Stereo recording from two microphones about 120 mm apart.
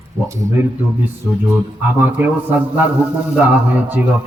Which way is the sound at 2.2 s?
15° right (ahead or behind).